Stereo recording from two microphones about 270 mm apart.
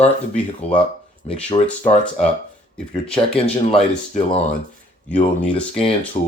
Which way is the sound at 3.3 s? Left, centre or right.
Left.